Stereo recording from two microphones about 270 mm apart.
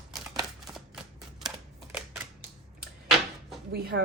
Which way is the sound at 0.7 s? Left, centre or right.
Centre.